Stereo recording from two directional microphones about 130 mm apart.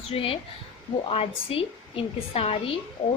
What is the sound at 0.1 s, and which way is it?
A woman's voice, 45° left (ahead or behind).